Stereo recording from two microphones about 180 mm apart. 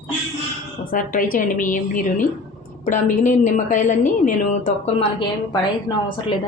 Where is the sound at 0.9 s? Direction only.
50° left (ahead or behind).